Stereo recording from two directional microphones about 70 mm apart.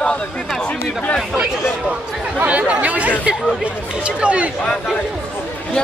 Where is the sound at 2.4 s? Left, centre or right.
Right.